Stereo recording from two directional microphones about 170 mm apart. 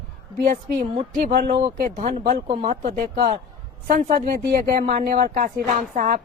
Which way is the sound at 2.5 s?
30° right (ahead or behind).